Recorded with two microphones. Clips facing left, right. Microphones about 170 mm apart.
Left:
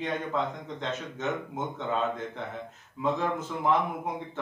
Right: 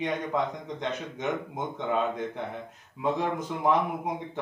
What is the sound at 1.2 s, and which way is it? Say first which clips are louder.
Speech: right 1 dB; 15° right (ahead or behind).